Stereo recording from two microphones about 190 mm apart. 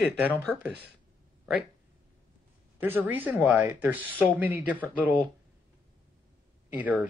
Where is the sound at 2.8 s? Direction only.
10° right (ahead or behind).